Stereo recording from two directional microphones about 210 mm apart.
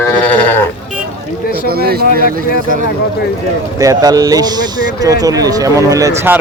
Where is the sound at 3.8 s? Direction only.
15° right (ahead or behind).